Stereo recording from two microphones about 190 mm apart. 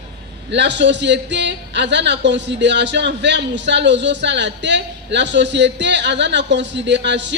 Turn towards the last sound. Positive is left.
turn(degrees=-65)  # may be behind; listen again after turning